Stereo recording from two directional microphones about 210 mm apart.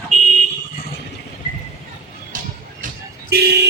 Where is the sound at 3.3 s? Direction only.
50° right (ahead or behind).